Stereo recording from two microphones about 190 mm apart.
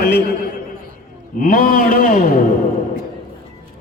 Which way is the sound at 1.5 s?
45° left (ahead or behind).